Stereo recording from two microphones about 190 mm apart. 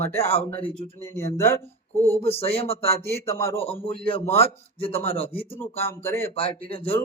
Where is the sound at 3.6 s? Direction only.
30° left (ahead or behind).